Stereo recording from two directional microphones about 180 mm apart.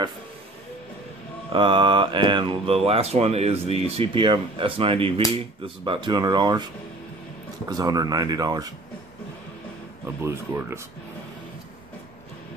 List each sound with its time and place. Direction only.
1.5 s speech: 25° right (ahead or behind)
10.2 s speech: 15° right (ahead or behind)